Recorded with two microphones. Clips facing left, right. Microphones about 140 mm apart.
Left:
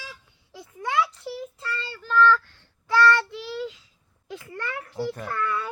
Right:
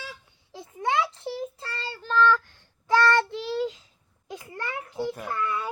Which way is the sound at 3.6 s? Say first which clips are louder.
Right 4 dB; 45° right (ahead or behind).